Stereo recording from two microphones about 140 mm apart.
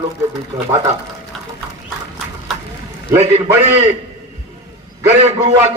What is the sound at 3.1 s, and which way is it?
Speech, 20° right (ahead or behind).